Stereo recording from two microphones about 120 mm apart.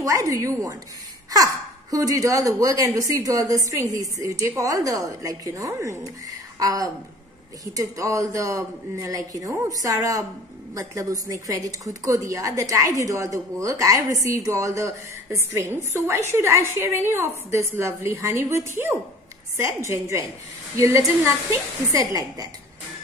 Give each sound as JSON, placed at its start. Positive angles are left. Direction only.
{"t": 0.0, "sound": "a woman's voice", "side_deg": -25}